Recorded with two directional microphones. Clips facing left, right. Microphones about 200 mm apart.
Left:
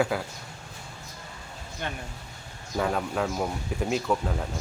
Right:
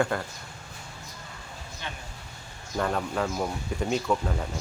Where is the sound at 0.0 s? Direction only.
5° left (ahead or behind).